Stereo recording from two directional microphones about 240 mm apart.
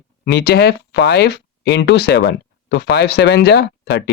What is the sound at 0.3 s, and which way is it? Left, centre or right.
Speech, left.